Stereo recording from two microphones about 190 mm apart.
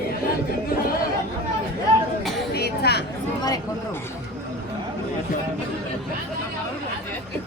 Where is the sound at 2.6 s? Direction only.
55° left (ahead or behind).